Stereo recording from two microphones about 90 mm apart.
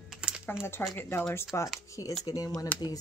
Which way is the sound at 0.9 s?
25° left (ahead or behind).